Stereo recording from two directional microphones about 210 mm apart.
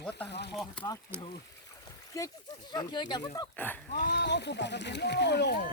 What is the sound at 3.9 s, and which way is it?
Speech, 45° left (ahead or behind).